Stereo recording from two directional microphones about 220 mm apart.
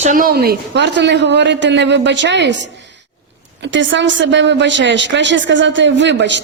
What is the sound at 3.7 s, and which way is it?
Speech, 55° right (ahead or behind).